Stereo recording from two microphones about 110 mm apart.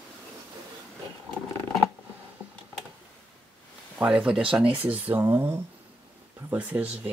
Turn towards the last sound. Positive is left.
turn(degrees=-15)  # may be behind; listen again after turning